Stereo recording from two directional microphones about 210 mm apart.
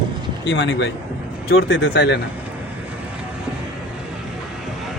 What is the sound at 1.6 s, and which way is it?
Speech, 70° left (ahead or behind).